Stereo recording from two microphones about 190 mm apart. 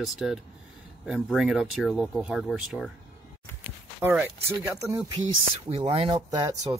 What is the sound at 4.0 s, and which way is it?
Speech, 10° right (ahead or behind).